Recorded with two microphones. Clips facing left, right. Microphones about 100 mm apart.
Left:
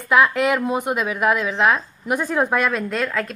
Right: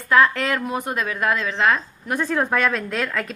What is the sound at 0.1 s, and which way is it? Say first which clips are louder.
A woman's voice: left 1 dB; 10° left (ahead or behind).